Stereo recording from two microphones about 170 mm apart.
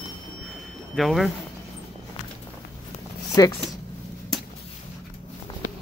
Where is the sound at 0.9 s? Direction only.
Centre (ahead or behind).